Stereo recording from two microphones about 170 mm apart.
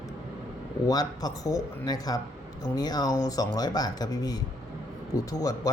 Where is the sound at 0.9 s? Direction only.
20° left (ahead or behind).